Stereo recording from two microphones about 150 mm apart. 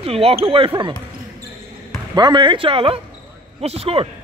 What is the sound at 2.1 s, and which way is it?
Speech, 30° right (ahead or behind).